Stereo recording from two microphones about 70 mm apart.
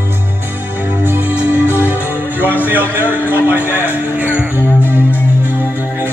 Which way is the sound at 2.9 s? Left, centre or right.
Right.